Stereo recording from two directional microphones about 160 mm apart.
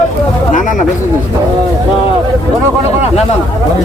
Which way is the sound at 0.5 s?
50° left (ahead or behind).